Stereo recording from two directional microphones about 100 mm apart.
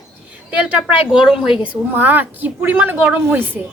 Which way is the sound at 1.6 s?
15° right (ahead or behind).